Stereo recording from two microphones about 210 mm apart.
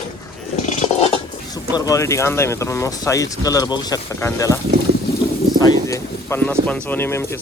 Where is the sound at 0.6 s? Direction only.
30° left (ahead or behind).